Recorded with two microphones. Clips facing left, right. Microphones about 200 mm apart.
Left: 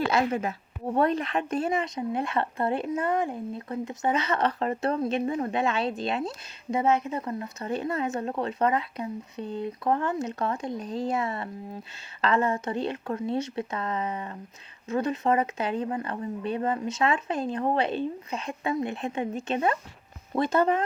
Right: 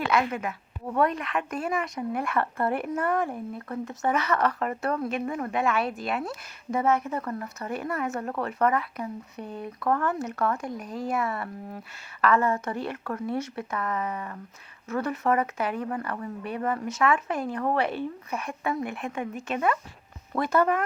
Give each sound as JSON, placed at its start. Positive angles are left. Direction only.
{"t": 0.1, "sound": "speech", "side_deg": 30}